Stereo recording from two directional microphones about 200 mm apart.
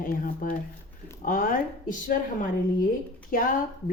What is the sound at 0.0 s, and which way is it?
Speech, 45° left (ahead or behind).